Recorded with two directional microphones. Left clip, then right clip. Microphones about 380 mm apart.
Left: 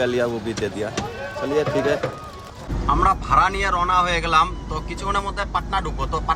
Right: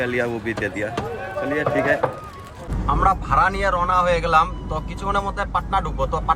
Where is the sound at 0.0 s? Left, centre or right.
Centre.